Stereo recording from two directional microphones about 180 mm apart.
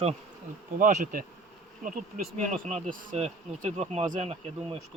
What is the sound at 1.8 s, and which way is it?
Speech, 45° right (ahead or behind).